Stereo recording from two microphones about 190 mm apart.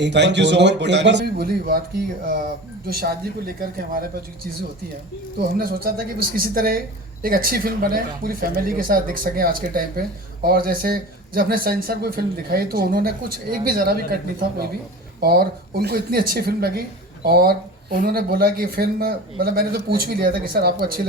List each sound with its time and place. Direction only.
0.0 s speech: 65° right (ahead or behind)
5.5 s speech: 50° right (ahead or behind)
15.2 s speech: 55° right (ahead or behind)